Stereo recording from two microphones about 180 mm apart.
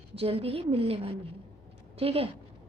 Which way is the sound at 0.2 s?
30° right (ahead or behind).